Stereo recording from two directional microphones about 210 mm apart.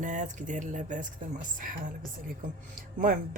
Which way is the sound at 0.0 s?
35° right (ahead or behind).